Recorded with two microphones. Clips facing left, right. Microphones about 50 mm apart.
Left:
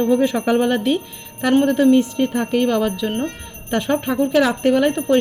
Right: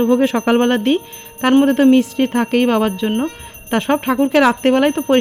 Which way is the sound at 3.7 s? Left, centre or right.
Right.